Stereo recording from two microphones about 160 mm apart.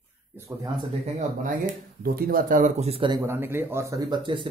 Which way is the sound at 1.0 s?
45° right (ahead or behind).